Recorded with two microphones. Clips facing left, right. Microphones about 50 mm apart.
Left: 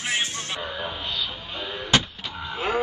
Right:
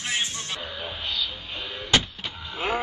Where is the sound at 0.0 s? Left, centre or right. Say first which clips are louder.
Left 2 dB; centre.